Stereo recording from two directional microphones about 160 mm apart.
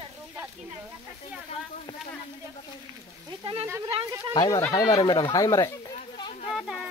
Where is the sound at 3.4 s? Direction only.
35° right (ahead or behind).